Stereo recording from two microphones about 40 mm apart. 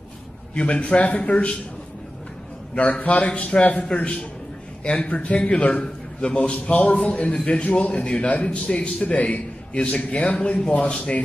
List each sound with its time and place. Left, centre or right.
0.6 s a man's voice: left
2.7 s a man's voice: left